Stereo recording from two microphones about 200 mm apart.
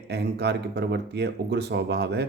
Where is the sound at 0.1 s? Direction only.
55° right (ahead or behind).